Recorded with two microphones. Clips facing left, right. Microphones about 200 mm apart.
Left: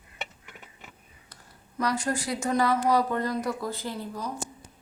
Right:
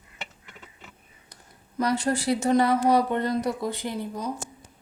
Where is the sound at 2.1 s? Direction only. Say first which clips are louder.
Right 5 dB; 30° right (ahead or behind).